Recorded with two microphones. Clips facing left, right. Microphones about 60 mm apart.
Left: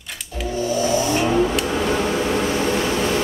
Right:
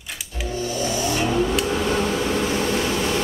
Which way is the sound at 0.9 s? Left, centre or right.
Left.